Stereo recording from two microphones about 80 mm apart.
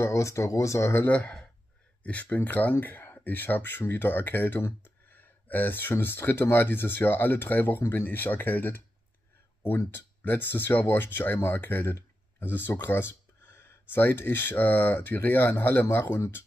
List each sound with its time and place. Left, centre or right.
0.0 s speech: left
1.0 s speech: centre